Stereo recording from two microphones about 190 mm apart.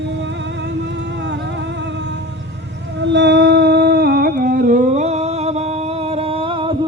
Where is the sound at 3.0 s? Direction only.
65° right (ahead or behind); by 5.6 s 35° right (ahead or behind).